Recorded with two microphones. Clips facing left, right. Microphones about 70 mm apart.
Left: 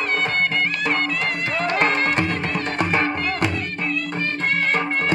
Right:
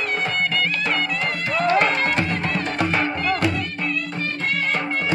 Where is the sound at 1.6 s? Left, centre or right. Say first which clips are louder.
Right 2 dB; left.